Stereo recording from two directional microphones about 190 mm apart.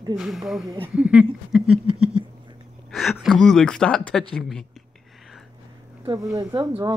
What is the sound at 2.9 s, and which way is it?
Speech, centre (ahead or behind).